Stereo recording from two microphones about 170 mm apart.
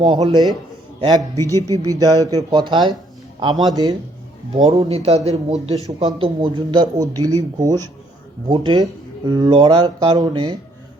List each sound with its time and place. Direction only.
0.0 s speech: 35° right (ahead or behind)
1.0 s speech: 20° right (ahead or behind)
4.5 s speech: 30° right (ahead or behind)